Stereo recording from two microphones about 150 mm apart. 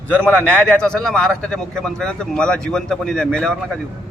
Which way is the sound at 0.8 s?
5° left (ahead or behind).